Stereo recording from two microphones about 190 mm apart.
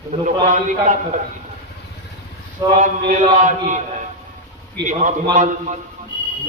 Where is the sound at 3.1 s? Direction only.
40° right (ahead or behind).